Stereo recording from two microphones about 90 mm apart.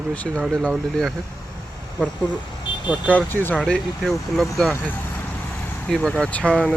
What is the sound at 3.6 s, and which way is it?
Speech, 5° left (ahead or behind).